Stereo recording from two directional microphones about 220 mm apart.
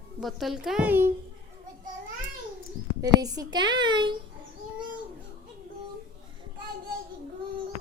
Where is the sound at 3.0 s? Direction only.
15° right (ahead or behind).